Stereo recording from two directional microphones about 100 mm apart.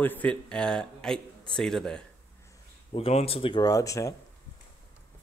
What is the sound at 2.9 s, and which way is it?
Speech, 75° left (ahead or behind).